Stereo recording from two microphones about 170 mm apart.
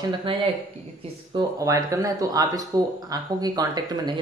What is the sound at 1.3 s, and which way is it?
Speech, 20° right (ahead or behind).